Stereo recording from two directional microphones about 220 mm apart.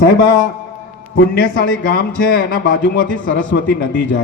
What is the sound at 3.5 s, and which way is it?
Speech, 50° left (ahead or behind).